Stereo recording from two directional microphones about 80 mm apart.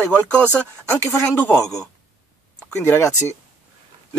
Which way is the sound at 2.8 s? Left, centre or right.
Left.